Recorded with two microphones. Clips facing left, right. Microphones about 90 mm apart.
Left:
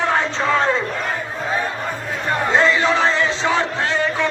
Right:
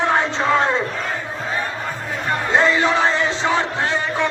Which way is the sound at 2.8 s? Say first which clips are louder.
Even; 20° right (ahead or behind).